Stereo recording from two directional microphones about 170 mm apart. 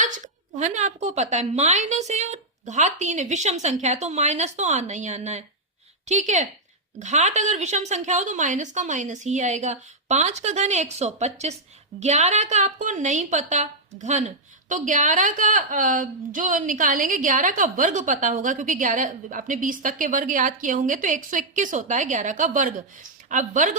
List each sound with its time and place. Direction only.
0.6 s a woman's voice: 45° right (ahead or behind)